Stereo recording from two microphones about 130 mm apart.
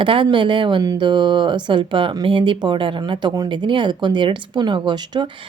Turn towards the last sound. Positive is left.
turn(degrees=-35)  # may be behind; listen again after turning